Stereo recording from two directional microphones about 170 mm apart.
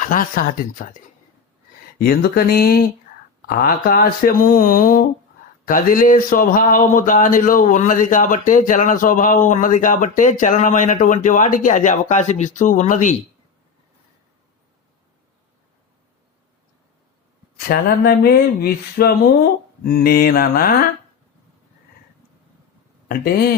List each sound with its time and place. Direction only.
0.0 s speech: 50° left (ahead or behind)
2.0 s speech: 65° left (ahead or behind); by 13.1 s 45° left (ahead or behind)
17.7 s speech: 60° left (ahead or behind)
23.0 s speech: 60° left (ahead or behind)